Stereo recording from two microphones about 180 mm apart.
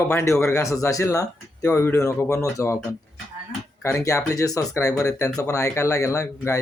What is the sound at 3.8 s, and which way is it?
Speech, 15° left (ahead or behind).